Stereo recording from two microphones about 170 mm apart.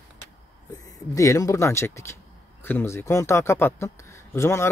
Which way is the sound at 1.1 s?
20° left (ahead or behind).